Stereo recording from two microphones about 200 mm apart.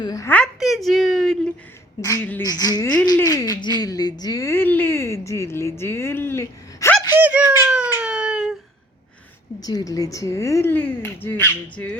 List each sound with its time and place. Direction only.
0.0 s a woman's voice: 15° left (ahead or behind)
7.1 s speech: 10° right (ahead or behind)
9.6 s speech: 20° left (ahead or behind)